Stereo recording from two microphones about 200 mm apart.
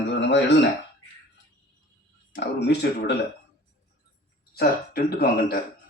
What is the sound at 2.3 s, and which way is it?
Speech, 55° left (ahead or behind).